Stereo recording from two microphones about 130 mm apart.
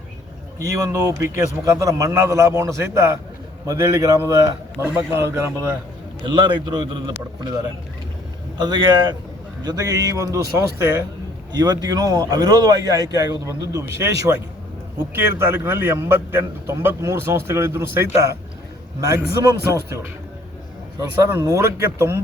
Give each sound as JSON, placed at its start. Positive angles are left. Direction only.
{"t": 0.6, "sound": "a man's voice", "side_deg": -20}
{"t": 6.2, "sound": "a man's voice", "side_deg": -35}
{"t": 8.5, "sound": "a man's voice", "side_deg": -35}
{"t": 21.0, "sound": "a man's voice", "side_deg": -25}